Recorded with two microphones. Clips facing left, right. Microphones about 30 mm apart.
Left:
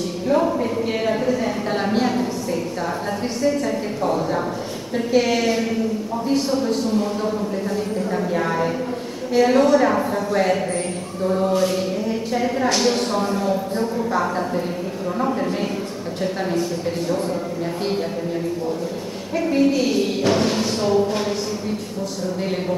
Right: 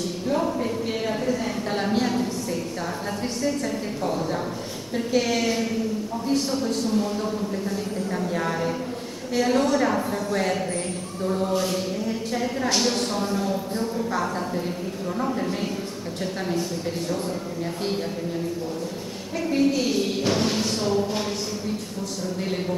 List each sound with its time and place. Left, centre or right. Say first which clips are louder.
0.3 s a sound: left 6 dB; centre
3.4 s speech: left 6 dB; centre
19.3 s a woman's voice: left 4 dB; centre